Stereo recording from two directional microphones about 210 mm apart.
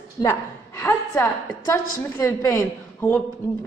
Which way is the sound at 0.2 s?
15° left (ahead or behind).